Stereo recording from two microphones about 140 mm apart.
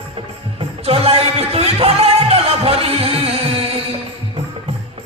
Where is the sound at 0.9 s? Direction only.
45° right (ahead or behind).